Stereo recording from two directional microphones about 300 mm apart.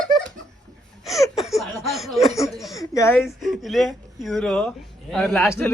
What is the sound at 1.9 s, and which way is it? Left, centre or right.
Chuckle, centre.